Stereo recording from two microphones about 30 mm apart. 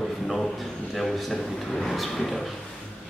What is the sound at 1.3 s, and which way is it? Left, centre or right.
Speech, centre.